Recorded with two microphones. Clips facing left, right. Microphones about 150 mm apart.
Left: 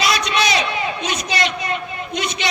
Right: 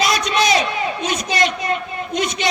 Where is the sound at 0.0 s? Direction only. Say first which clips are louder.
Right 1 dB; 45° right (ahead or behind).